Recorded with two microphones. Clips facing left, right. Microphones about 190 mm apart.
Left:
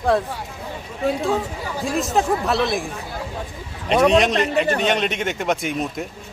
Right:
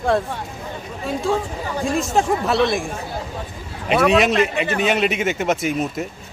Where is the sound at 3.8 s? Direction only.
5° right (ahead or behind).